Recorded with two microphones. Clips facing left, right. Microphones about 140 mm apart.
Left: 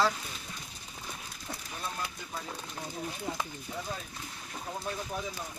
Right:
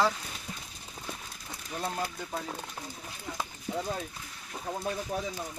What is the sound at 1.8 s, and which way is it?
Speech, 55° right (ahead or behind).